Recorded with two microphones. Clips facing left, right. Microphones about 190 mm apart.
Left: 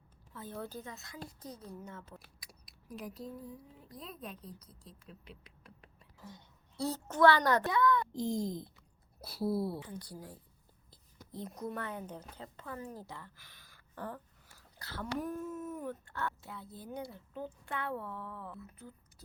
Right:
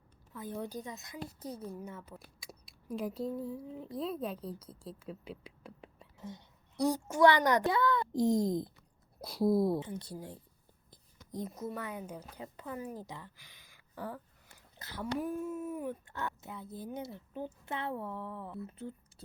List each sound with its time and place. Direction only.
0.3 s a woman's voice: 15° right (ahead or behind); by 5.4 s 30° right (ahead or behind)
6.7 s a woman's voice: 15° right (ahead or behind)
7.7 s speech: 30° right (ahead or behind)
8.1 s a child's voice: 70° right (ahead or behind)
9.2 s a woman's voice: 15° right (ahead or behind)
9.6 s a woman's voice: 45° right (ahead or behind)
9.8 s speech: 25° right (ahead or behind)
10.9 s whispering: 15° right (ahead or behind)
11.4 s a woman's voice: 5° right (ahead or behind); by 18.9 s 25° right (ahead or behind)